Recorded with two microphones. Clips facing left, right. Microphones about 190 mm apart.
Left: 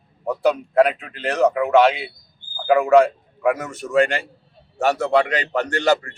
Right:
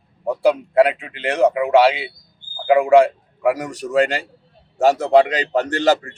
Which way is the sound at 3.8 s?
30° right (ahead or behind).